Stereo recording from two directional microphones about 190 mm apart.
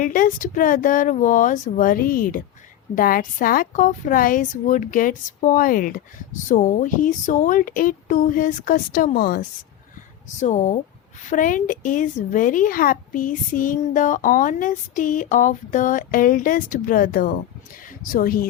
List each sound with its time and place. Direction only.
0.0 s a woman's voice: 45° left (ahead or behind)
10.4 s a woman's voice: 40° left (ahead or behind)